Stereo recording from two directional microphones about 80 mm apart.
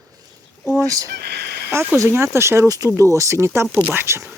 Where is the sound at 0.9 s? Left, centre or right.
Right.